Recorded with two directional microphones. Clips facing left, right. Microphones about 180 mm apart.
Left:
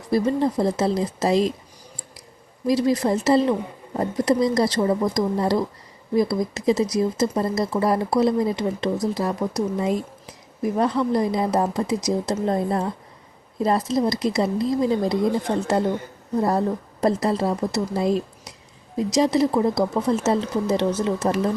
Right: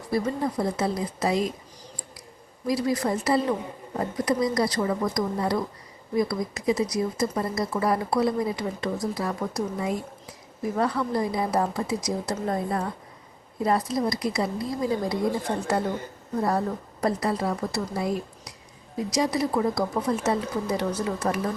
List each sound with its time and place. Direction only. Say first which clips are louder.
0.1 s speech: left 6 dB; 25° left (ahead or behind)
2.6 s speech: left 5 dB; 25° left (ahead or behind)
16.4 s speech: left 4 dB; 25° left (ahead or behind)